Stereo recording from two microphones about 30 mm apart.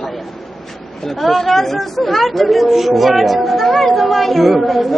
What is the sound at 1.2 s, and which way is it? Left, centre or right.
A woman's voice, centre.